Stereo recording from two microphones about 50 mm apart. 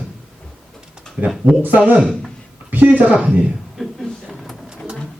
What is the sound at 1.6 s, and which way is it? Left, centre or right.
Speech, right.